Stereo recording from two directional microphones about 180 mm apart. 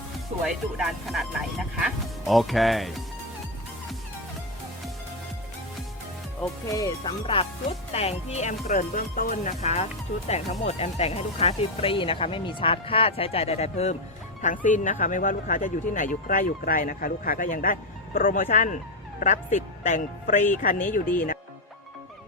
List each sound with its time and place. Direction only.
0.4 s speech: 5° right (ahead or behind)
6.7 s speech: 20° left (ahead or behind)
7.9 s speech: 35° left (ahead or behind)